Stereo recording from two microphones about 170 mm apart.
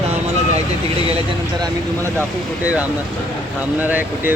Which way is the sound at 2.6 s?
10° right (ahead or behind).